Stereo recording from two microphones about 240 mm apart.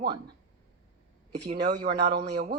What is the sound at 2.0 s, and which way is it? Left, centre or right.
Speech, right.